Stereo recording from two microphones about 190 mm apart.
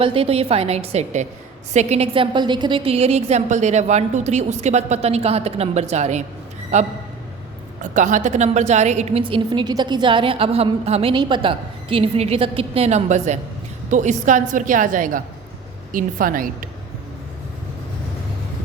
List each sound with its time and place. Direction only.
0.0 s a woman's voice: 30° right (ahead or behind); by 16.6 s 45° right (ahead or behind)